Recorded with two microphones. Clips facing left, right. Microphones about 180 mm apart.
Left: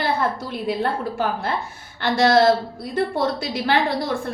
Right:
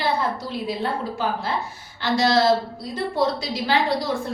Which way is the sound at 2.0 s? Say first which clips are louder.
Left 3 dB; 55° left (ahead or behind).